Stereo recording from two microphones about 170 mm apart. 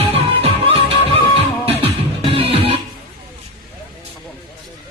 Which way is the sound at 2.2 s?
35° right (ahead or behind).